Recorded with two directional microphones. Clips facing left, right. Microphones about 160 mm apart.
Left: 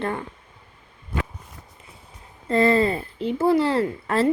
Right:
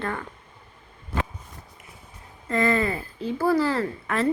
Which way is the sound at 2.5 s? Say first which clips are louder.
Left 4 dB; 30° left (ahead or behind).